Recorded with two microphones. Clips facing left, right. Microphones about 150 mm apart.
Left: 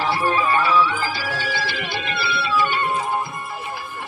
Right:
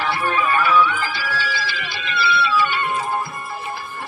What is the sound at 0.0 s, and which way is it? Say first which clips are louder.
Music: left 1 dB; 35° left (ahead or behind).